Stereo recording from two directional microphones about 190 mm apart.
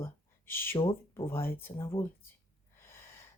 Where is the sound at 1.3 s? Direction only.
10° left (ahead or behind).